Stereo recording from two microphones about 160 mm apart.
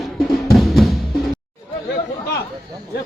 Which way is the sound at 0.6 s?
Centre (ahead or behind).